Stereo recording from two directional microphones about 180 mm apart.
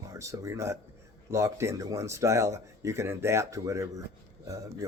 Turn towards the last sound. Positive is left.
turn(degrees=-15)  # may be behind; listen again after turning